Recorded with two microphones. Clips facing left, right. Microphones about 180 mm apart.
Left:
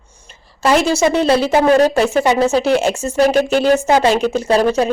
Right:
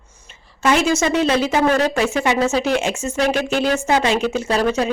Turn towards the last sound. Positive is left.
turn(degrees=35)  # may be behind; listen again after turning